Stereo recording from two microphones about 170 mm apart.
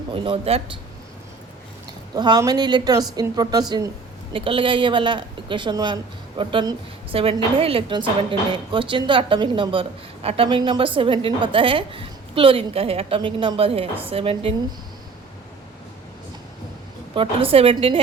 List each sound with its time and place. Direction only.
0.1 s a woman's voice: 30° right (ahead or behind)
2.1 s speech: 25° right (ahead or behind)
4.3 s a woman's voice: 30° right (ahead or behind)
17.2 s a woman's voice: 35° right (ahead or behind)